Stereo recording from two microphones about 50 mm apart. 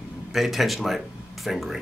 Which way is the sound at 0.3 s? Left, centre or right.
Centre.